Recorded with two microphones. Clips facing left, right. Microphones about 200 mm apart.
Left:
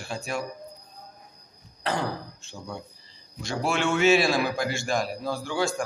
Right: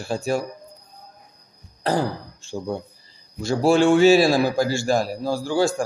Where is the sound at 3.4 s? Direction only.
35° right (ahead or behind).